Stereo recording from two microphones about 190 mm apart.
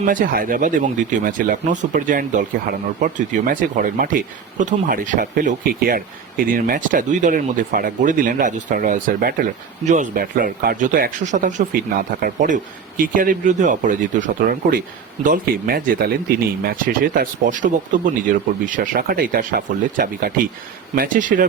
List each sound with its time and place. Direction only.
0.0 s speech: 45° right (ahead or behind)